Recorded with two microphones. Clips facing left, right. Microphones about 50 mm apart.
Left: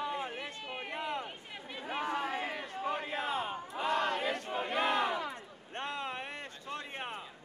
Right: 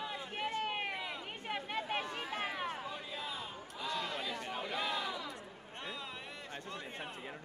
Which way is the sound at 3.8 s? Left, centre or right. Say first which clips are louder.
Left 7 dB; left.